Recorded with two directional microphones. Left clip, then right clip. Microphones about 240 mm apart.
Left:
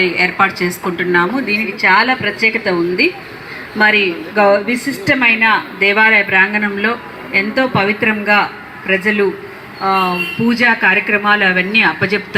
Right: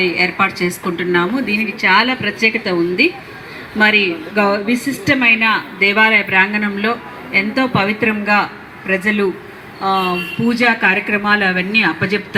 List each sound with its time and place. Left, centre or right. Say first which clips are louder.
0.2 s a woman's voice: left 2 dB; right